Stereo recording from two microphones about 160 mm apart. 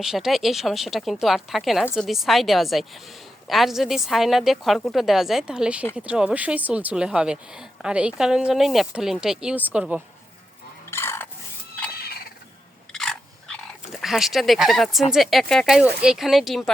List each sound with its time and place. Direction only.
0.0 s speech: 5° right (ahead or behind)
10.9 s a sound: 15° left (ahead or behind)
12.9 s biting: 5° left (ahead or behind)
14.0 s speech: centre (ahead or behind)